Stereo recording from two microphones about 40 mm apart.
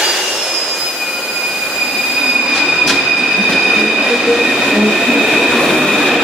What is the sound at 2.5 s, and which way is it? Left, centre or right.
Train, centre.